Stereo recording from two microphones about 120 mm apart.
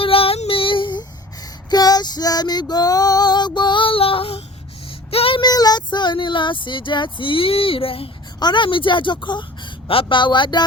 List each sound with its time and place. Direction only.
0.0 s female singing: 50° left (ahead or behind)
5.1 s child singing: 50° left (ahead or behind)
5.4 s speech: 35° left (ahead or behind); by 8.1 s 50° left (ahead or behind)
8.4 s a woman's voice: 40° left (ahead or behind)